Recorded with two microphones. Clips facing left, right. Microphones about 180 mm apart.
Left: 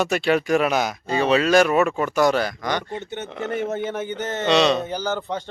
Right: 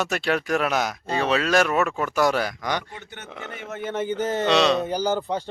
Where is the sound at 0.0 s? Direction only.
Centre (ahead or behind).